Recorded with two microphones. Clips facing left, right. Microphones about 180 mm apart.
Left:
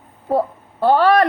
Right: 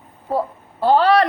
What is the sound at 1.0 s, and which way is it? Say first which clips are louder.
Speech: even; 45° left (ahead or behind).